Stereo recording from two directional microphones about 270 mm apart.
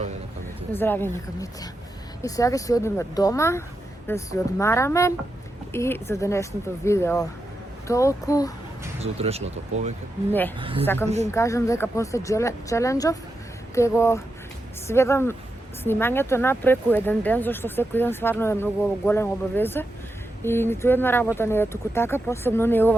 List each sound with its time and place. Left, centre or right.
0.7 s speech: centre
9.0 s speech: right
10.6 s speech: centre
10.8 s speech: centre